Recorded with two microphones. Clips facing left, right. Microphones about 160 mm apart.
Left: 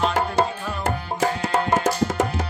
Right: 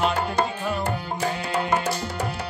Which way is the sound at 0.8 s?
90° left.